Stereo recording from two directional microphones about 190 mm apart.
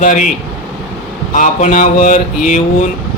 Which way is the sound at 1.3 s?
40° left (ahead or behind).